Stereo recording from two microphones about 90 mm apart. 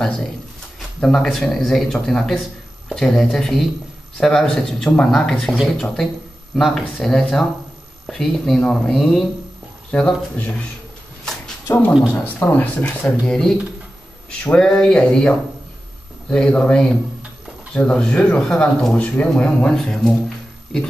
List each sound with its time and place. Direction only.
1.0 s speech: 5° left (ahead or behind); by 12.9 s 20° left (ahead or behind)
13.0 s speech: 5° left (ahead or behind)